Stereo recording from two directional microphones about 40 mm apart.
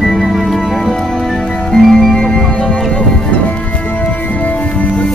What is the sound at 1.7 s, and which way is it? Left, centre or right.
Music, centre.